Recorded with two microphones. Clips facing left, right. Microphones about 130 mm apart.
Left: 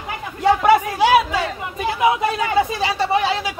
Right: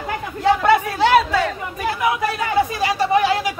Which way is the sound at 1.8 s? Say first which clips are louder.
Left 3 dB; 20° left (ahead or behind).